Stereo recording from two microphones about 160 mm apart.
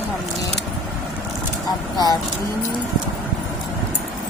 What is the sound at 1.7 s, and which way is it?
Speech, 25° left (ahead or behind).